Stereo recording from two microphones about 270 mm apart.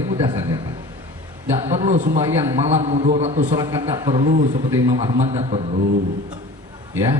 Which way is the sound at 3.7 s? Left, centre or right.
Centre.